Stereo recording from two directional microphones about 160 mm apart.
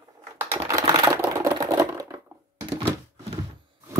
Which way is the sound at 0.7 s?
20° right (ahead or behind).